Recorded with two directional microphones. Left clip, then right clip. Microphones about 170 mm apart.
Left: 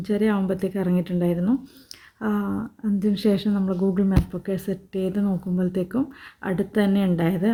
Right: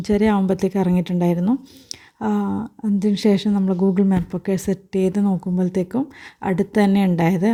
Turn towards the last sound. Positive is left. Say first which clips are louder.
# right 4 dB
turn(degrees=-40)  # may be behind; listen again after turning